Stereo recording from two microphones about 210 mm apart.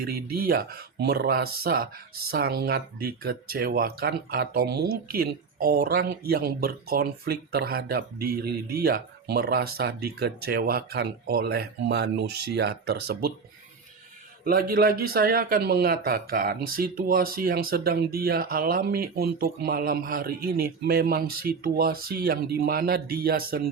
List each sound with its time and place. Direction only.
0.0 s speech: 45° right (ahead or behind)
14.4 s speech: 45° right (ahead or behind)